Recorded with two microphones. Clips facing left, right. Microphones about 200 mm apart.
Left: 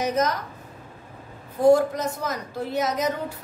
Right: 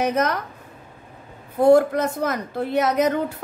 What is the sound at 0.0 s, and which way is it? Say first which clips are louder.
Speech: right 2 dB; 60° right (ahead or behind).